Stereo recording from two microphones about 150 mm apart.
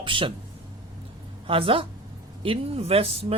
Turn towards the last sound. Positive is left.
turn(degrees=-40)  # may be behind; listen again after turning